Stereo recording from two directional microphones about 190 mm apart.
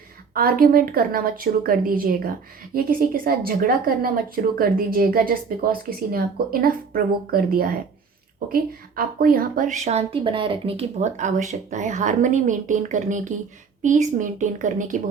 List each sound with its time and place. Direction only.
0.3 s a woman's voice: 50° right (ahead or behind)